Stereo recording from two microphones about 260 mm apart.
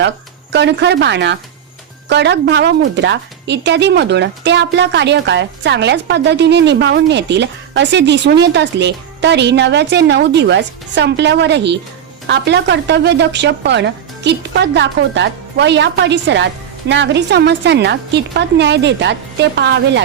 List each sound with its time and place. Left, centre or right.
0.5 s a woman's voice: right